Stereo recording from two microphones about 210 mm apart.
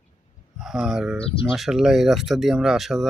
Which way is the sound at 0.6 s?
Centre (ahead or behind).